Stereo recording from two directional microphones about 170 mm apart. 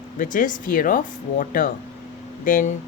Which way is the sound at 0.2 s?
50° left (ahead or behind).